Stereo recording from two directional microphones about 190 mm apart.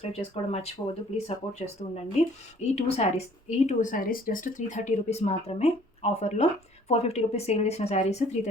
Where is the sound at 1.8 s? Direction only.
30° left (ahead or behind).